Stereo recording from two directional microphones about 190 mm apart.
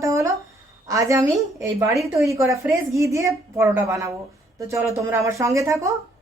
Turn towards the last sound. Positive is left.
turn(degrees=-15)  # may be behind; listen again after turning